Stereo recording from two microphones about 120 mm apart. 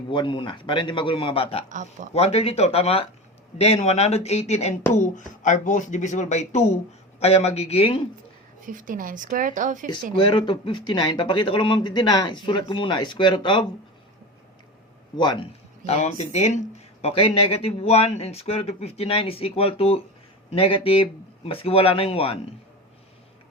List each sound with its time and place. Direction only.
0.1 s speech: 45° left (ahead or behind); by 6.7 s 75° left (ahead or behind)
7.2 s speech: 60° left (ahead or behind)
8.6 s speech: 90° right
10.2 s speech: 40° left (ahead or behind)
15.1 s speech: 40° left (ahead or behind)
15.8 s speech: 70° left (ahead or behind)
17.0 s speech: 50° left (ahead or behind)